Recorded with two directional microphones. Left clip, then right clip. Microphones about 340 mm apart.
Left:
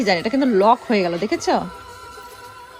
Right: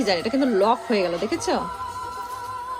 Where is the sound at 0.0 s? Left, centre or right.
Centre.